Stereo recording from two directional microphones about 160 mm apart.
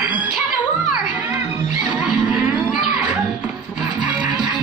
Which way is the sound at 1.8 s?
5° right (ahead or behind).